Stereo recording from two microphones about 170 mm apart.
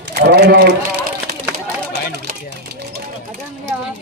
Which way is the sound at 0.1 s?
75° right (ahead or behind).